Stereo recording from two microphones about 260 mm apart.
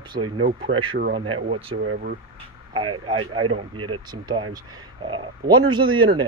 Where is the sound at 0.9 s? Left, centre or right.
Right.